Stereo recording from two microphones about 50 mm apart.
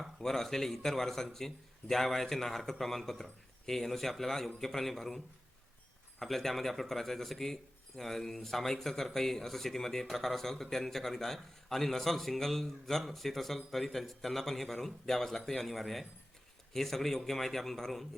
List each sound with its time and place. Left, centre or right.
0.2 s a man's voice: centre